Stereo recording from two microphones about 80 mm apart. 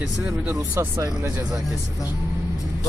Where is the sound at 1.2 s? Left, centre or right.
Right.